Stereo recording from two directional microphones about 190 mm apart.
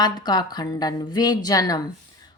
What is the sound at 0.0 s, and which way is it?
Speech, 20° left (ahead or behind).